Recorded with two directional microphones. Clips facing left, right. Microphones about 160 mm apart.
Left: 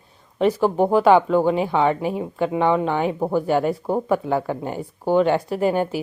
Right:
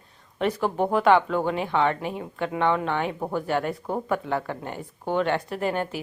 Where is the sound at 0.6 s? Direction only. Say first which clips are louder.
Left 5 dB; 35° left (ahead or behind).